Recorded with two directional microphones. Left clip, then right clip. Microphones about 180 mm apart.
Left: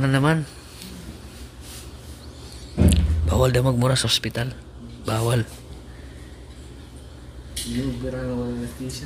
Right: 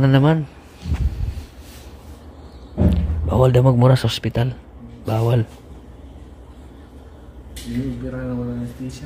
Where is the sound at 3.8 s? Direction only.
20° right (ahead or behind).